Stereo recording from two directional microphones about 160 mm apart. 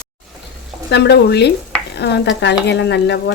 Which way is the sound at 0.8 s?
90° left.